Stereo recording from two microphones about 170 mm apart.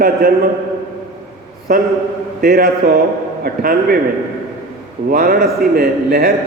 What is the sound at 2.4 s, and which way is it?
A man's voice, 65° right (ahead or behind).